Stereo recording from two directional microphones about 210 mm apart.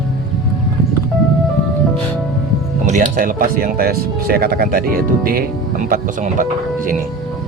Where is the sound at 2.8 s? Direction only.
40° right (ahead or behind).